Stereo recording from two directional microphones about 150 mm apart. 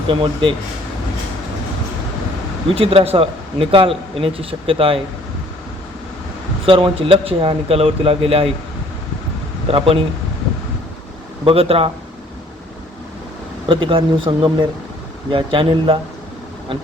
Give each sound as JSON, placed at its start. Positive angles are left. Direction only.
{"t": 0.1, "sound": "speech", "side_deg": -35}
{"t": 2.7, "sound": "speech", "side_deg": -40}
{"t": 6.7, "sound": "speech", "side_deg": -35}
{"t": 9.6, "sound": "speech", "side_deg": -40}
{"t": 11.4, "sound": "speech", "side_deg": -40}
{"t": 13.7, "sound": "speech", "side_deg": -35}